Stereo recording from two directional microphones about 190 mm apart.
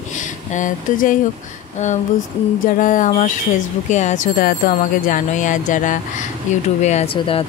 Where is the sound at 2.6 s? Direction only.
45° left (ahead or behind).